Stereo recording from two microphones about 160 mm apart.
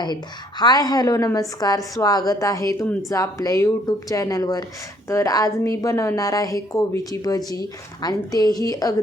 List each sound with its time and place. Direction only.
0.6 s a woman's voice: 25° left (ahead or behind)